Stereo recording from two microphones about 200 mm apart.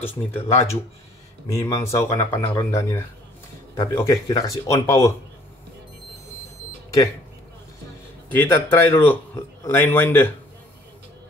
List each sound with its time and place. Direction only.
0.0 s speech: 10° left (ahead or behind)
8.3 s speech: 10° left (ahead or behind)